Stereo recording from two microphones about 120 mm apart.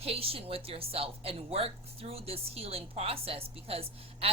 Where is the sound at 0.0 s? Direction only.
55° right (ahead or behind).